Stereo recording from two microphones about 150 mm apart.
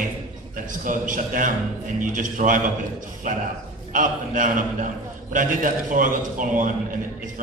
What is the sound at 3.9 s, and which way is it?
A man's voice, 60° right (ahead or behind).